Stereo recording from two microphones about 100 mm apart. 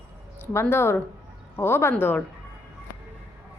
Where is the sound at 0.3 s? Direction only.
25° left (ahead or behind).